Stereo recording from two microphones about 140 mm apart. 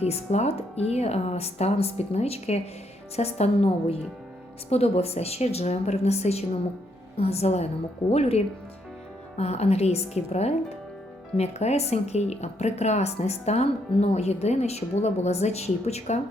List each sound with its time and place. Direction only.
0.0 s speech: 50° left (ahead or behind)